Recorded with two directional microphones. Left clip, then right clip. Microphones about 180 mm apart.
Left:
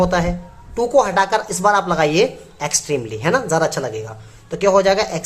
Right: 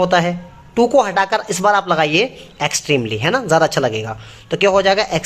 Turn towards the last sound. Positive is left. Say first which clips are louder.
# right 1 dB
turn(degrees=-25)  # may be behind; listen again after turning